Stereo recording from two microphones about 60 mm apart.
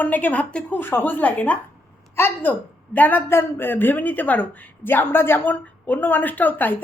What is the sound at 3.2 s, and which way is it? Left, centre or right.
Speech, left.